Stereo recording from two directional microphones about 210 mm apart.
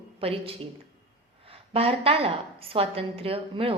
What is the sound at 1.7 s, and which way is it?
A woman's voice, 25° right (ahead or behind).